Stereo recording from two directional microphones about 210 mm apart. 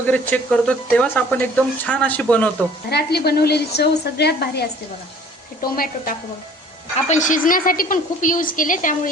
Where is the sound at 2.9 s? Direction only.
50° left (ahead or behind).